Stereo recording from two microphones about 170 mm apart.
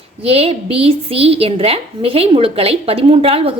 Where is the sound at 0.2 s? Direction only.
35° right (ahead or behind).